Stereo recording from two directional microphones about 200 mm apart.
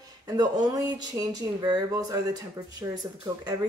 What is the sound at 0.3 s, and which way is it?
Speech, 20° right (ahead or behind).